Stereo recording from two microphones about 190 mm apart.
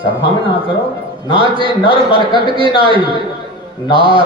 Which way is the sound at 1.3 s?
25° right (ahead or behind).